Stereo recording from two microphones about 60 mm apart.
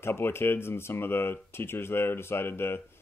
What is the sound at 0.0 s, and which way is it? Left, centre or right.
Speech, left.